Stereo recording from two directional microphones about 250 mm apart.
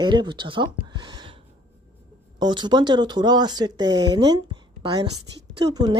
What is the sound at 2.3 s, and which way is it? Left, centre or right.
A woman's voice, centre.